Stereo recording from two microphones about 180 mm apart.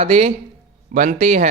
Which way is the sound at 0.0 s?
35° right (ahead or behind).